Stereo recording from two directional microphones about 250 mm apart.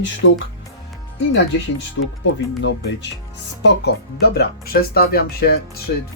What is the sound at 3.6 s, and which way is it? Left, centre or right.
Speech, left.